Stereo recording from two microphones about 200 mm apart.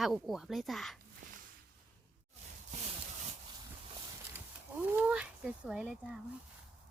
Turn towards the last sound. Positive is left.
turn(degrees=-5)  # may be behind; listen again after turning